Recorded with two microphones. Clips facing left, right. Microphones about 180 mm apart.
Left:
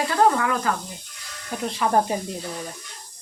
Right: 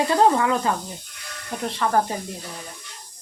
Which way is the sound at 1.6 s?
Centre (ahead or behind).